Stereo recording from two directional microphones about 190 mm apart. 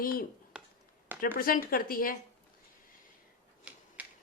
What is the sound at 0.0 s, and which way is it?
Speech, 50° left (ahead or behind).